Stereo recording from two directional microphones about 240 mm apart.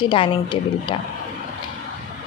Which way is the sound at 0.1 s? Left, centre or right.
Left.